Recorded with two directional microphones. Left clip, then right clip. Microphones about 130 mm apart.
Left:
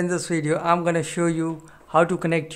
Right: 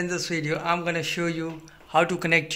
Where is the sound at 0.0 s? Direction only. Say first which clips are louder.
Left 3 dB; 75° left (ahead or behind).